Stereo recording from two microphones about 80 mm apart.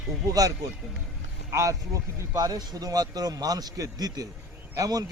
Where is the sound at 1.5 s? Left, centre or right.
Right.